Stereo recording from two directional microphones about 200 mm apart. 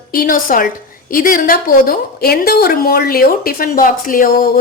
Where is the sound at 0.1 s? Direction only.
45° left (ahead or behind).